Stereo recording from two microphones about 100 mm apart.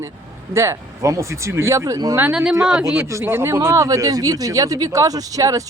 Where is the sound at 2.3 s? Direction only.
5° right (ahead or behind).